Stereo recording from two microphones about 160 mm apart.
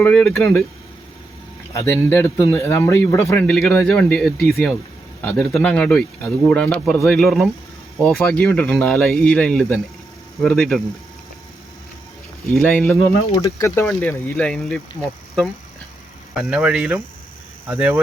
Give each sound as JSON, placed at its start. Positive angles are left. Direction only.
{"t": 0.0, "sound": "speech", "side_deg": 5}
{"t": 1.7, "sound": "speech", "side_deg": 15}
{"t": 12.5, "sound": "speech", "side_deg": 5}
{"t": 13.1, "sound": "speech", "side_deg": 20}
{"t": 14.3, "sound": "speech", "side_deg": 5}